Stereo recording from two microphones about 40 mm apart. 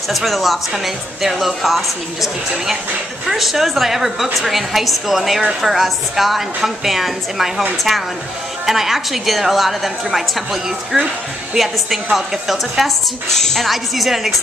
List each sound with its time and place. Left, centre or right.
0.1 s a woman's voice: centre
8.6 s a woman's voice: centre
13.3 s speech: centre
13.7 s a woman's voice: centre